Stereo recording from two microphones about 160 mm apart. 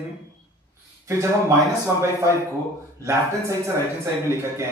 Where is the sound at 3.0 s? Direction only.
15° right (ahead or behind).